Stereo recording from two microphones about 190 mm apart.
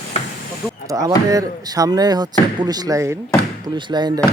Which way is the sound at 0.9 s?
20° right (ahead or behind).